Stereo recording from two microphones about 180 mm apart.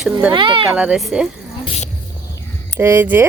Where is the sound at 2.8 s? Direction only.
10° right (ahead or behind).